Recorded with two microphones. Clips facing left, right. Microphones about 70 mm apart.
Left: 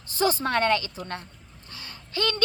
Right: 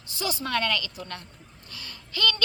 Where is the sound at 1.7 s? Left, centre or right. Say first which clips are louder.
Left 3 dB; left.